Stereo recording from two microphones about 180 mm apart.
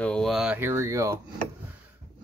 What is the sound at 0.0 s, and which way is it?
Speech, 5° left (ahead or behind).